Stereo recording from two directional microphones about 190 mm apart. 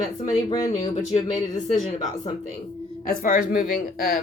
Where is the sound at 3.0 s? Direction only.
50° left (ahead or behind).